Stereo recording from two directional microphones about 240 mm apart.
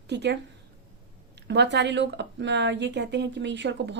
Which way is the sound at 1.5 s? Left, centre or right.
Right.